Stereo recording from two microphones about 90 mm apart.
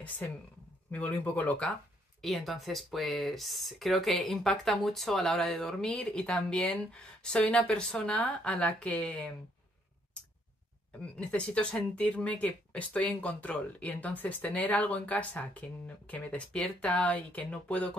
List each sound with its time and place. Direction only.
0.2 s speech: 15° left (ahead or behind)
2.2 s speech: centre (ahead or behind)
11.0 s speech: 10° left (ahead or behind)